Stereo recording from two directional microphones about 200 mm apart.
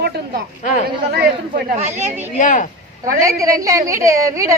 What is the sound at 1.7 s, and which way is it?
Speech, 35° right (ahead or behind).